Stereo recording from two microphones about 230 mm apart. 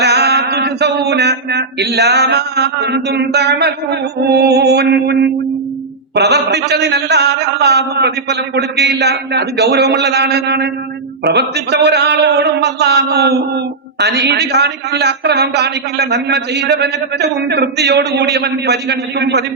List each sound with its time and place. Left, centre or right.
0.0 s mantra: right
6.1 s a man's voice: right